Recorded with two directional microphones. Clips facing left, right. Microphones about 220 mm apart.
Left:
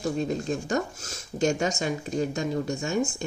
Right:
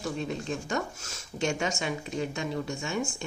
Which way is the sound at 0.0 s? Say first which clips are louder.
Left 5 dB; 40° left (ahead or behind).